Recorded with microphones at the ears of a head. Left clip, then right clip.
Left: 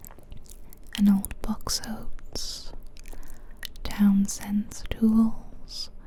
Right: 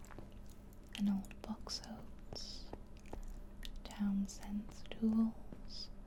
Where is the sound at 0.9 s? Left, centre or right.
Left.